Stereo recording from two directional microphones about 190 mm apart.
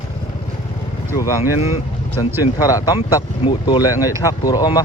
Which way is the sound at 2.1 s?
20° left (ahead or behind).